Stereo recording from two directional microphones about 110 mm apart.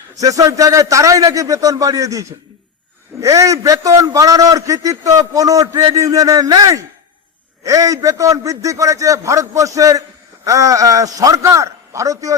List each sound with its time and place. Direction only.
0.2 s a man's voice: 30° right (ahead or behind)